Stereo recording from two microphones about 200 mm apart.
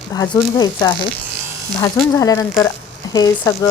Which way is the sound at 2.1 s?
15° left (ahead or behind).